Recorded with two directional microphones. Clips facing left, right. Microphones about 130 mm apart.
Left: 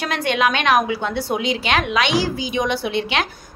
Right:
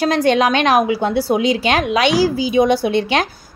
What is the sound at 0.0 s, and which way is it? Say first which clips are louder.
A woman's voice: right 6 dB; 35° right (ahead or behind).